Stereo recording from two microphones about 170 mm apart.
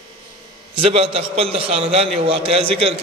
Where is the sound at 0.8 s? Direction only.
35° right (ahead or behind).